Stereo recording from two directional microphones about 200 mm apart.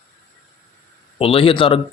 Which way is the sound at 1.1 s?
30° left (ahead or behind).